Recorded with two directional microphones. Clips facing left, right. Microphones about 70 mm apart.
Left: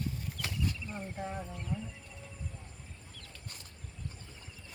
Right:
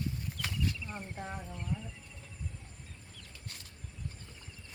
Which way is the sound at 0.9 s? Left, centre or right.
Centre.